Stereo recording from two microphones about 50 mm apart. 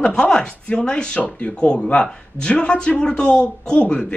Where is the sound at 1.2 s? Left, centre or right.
Left.